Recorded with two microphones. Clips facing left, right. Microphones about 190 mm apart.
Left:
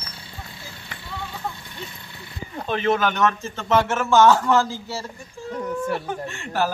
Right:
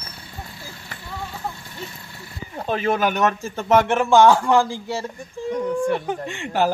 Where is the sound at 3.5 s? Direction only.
15° right (ahead or behind).